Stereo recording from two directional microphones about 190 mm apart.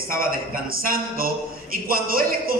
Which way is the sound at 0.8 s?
50° right (ahead or behind).